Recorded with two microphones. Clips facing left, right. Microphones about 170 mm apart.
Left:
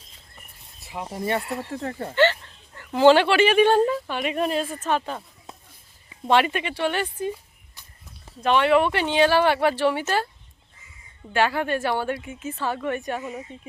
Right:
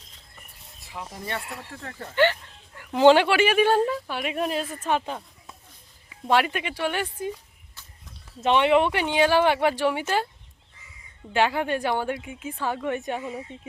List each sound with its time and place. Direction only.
1.0 s speech: 15° left (ahead or behind)
1.7 s speech: 25° left (ahead or behind)
2.1 s a woman's voice: 10° right (ahead or behind)
6.2 s speech: 5° right (ahead or behind)
7.8 s a sound: 15° left (ahead or behind)
8.4 s speech: 25° right (ahead or behind)
11.3 s speech: 15° right (ahead or behind)